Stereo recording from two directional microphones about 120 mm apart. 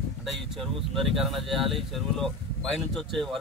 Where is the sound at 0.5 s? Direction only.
Centre (ahead or behind).